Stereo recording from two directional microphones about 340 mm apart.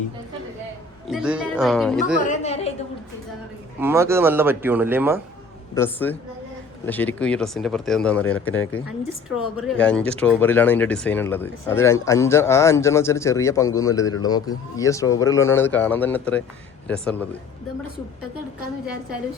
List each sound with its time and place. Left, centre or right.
1.0 s speech: centre
2.2 s a woman's voice: centre
3.8 s a man's voice: centre
5.7 s speech: centre
9.6 s speech: centre